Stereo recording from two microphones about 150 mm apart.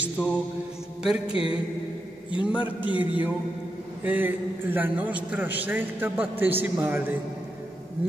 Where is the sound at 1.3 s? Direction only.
35° left (ahead or behind).